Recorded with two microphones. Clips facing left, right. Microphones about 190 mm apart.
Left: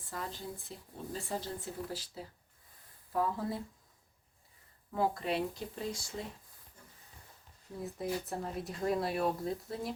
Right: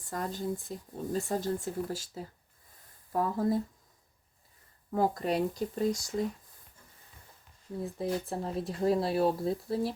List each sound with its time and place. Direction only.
0.1 s speech: 45° right (ahead or behind)
4.9 s speech: 40° right (ahead or behind)
7.9 s speech: 30° right (ahead or behind)